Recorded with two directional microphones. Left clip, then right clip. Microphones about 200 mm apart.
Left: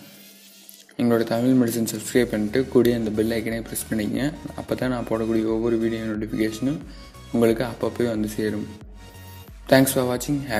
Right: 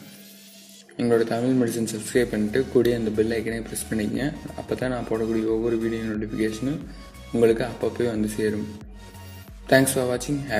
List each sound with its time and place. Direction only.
0.9 s speech: 30° left (ahead or behind)
9.7 s speech: 30° left (ahead or behind)